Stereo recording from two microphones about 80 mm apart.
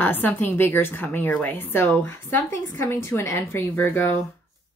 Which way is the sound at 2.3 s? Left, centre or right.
Left.